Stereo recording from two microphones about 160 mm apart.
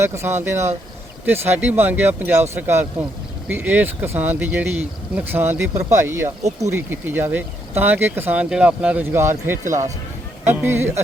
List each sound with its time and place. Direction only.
0.0 s speech: 15° right (ahead or behind)